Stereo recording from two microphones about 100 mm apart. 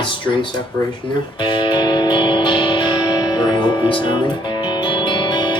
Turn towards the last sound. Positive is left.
turn(degrees=50)  # may be behind; listen again after turning